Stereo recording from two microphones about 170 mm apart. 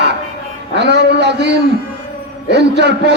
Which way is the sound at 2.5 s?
85° right.